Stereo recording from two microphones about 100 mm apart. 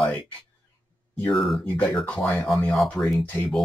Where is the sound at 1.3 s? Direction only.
Centre (ahead or behind).